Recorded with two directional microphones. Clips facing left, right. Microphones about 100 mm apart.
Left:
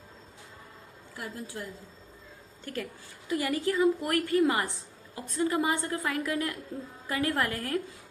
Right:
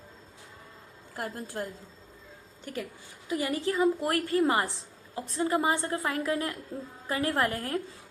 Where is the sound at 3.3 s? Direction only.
20° right (ahead or behind).